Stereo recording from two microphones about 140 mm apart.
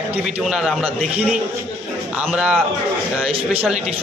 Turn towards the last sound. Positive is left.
turn(degrees=-5)  # may be behind; listen again after turning